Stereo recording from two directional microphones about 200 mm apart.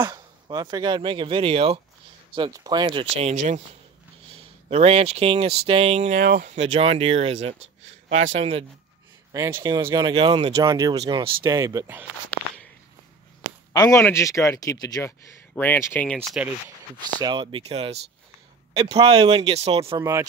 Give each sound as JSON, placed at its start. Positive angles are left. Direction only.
{"t": 0.0, "sound": "speech", "side_deg": -20}
{"t": 3.2, "sound": "speech", "side_deg": -35}
{"t": 6.1, "sound": "speech", "side_deg": -55}
{"t": 6.4, "sound": "speech", "side_deg": -30}
{"t": 7.5, "sound": "speech", "side_deg": -70}
{"t": 8.1, "sound": "speech", "side_deg": -35}
{"t": 9.3, "sound": "speech", "side_deg": -15}
{"t": 13.7, "sound": "a man's voice", "side_deg": 15}
{"t": 17.2, "sound": "speech", "side_deg": -20}
{"t": 20.0, "sound": "speech", "side_deg": -15}